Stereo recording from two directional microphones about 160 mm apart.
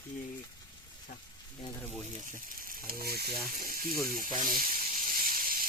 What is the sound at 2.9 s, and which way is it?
Frying, 70° right (ahead or behind).